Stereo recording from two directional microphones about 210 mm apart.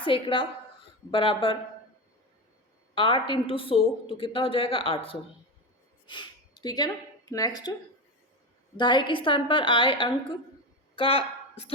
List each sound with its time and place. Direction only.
0.0 s a woman's voice: 25° left (ahead or behind)
2.9 s a woman's voice: 25° left (ahead or behind)
8.8 s a woman's voice: 20° left (ahead or behind)